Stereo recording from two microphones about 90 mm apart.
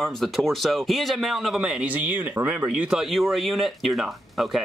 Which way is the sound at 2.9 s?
5° right (ahead or behind).